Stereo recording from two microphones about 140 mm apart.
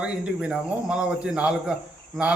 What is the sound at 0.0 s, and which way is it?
Speech, 5° right (ahead or behind).